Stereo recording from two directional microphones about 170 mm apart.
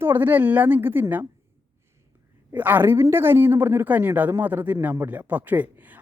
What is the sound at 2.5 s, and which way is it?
A man's voice, 10° right (ahead or behind).